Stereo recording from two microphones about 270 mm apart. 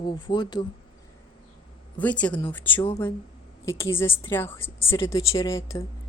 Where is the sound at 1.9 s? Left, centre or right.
Centre.